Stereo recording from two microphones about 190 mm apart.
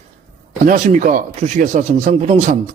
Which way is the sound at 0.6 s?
40° right (ahead or behind).